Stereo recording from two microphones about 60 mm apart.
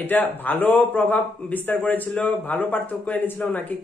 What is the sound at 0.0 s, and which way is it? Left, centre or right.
A man's voice, left.